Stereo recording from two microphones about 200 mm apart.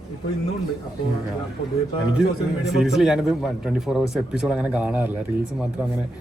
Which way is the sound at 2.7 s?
Centre (ahead or behind).